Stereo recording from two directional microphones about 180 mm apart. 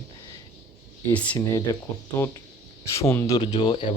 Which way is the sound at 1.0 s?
10° left (ahead or behind).